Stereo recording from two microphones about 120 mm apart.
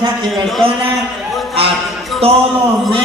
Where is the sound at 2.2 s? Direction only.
55° right (ahead or behind).